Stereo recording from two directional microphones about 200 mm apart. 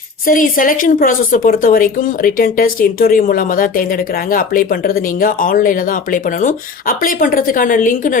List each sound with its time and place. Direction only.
0.3 s a woman's voice: 45° left (ahead or behind)